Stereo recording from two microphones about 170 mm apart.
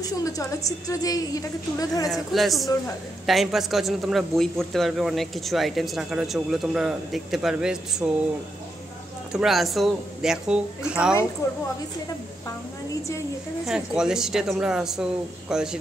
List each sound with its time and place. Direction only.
0.0 s a woman's voice: 20° left (ahead or behind)
2.0 s a man's voice: centre (ahead or behind)
9.3 s a man's voice: centre (ahead or behind)
11.4 s a woman's voice: 20° left (ahead or behind)
13.7 s a man's voice: 5° right (ahead or behind)